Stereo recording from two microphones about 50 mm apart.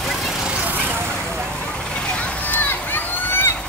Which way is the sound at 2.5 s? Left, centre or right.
Left.